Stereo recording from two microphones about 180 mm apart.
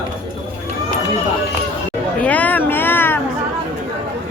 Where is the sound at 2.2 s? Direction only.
10° left (ahead or behind).